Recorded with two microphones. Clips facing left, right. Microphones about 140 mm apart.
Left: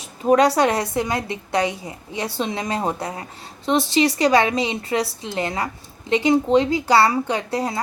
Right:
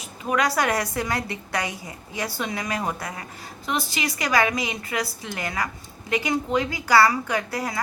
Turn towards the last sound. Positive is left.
turn(degrees=25)  # may be behind; listen again after turning